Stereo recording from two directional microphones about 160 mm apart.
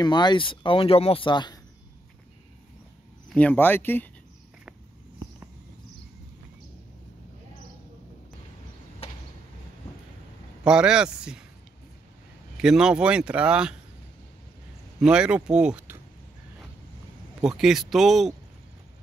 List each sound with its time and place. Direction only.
0.0 s speech: 25° left (ahead or behind)
3.3 s speech: 10° left (ahead or behind)
9.0 s a sound: 40° left (ahead or behind)
10.6 s speech: 5° right (ahead or behind)
12.5 s speech: 5° right (ahead or behind)
15.0 s speech: 5° right (ahead or behind)
17.4 s speech: 5° right (ahead or behind)